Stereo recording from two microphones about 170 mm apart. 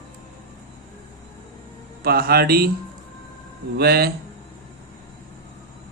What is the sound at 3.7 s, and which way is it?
Speech, 65° right (ahead or behind).